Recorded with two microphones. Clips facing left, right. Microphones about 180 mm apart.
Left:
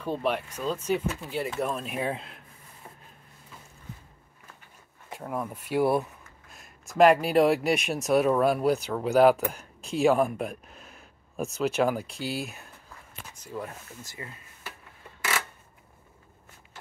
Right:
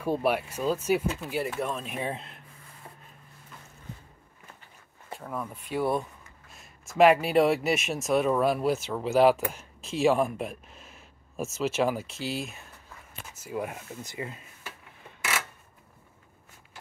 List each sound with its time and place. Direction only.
0.0 s speech: 10° right (ahead or behind)
5.1 s speech: 10° left (ahead or behind)
13.3 s speech: 10° right (ahead or behind)